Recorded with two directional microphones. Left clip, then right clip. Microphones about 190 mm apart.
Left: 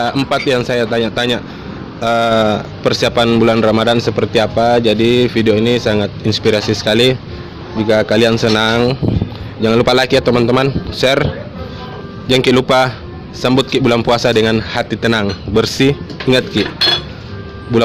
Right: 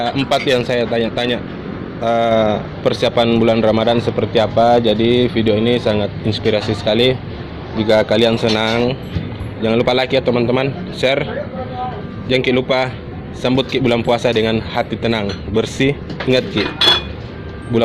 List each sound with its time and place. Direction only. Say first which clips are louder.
0.0 s a man's voice: left 1 dB; 40° left (ahead or behind)
12.3 s a man's voice: left 4 dB; 50° left (ahead or behind)
15.6 s speech: left 4 dB; 40° left (ahead or behind)